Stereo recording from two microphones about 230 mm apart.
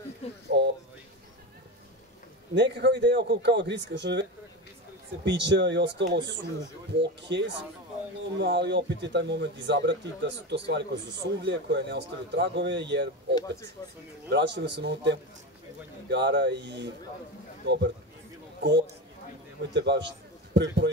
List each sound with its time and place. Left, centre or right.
0.5 s a sound: right
2.5 s speech: right
13.3 s speech: centre
14.3 s a man's voice: right